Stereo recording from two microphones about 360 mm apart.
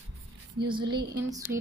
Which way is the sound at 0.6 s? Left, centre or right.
Centre.